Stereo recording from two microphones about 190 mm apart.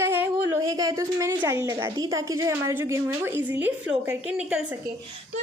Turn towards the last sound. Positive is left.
turn(degrees=-5)  # may be behind; listen again after turning